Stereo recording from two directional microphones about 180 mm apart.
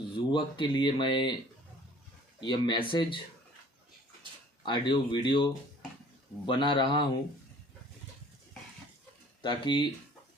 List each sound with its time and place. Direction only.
0.2 s speech: 25° left (ahead or behind)
2.4 s speech: 25° left (ahead or behind)
4.6 s speech: 25° left (ahead or behind)
9.4 s speech: 25° left (ahead or behind)